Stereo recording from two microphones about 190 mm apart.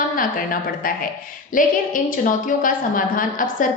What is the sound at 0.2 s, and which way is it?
A woman's voice, 45° left (ahead or behind).